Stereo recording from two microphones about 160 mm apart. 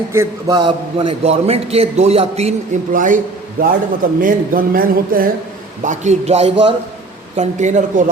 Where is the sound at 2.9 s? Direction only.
55° right (ahead or behind).